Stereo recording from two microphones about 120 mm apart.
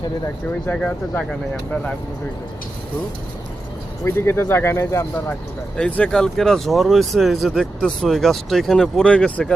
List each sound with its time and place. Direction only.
0.7 s speech: 10° left (ahead or behind)
4.0 s speech: 20° left (ahead or behind)
5.3 s speech: 10° left (ahead or behind)